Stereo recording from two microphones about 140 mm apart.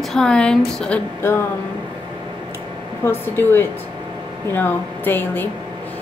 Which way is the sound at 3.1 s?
15° left (ahead or behind).